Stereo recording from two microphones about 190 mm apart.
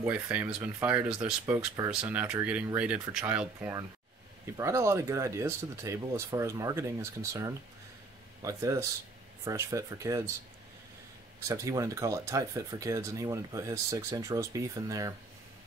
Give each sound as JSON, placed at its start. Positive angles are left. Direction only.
{"t": 0.0, "sound": "speech", "side_deg": -10}
{"t": 11.3, "sound": "speech", "side_deg": -15}